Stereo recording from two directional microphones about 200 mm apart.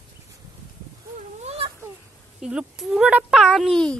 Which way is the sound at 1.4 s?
30° right (ahead or behind).